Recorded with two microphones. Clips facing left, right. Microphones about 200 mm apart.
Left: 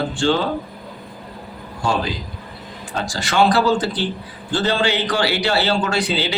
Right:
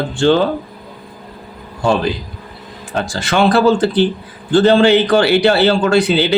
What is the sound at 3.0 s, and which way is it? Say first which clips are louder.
A man's voice: right 2 dB; 55° right (ahead or behind).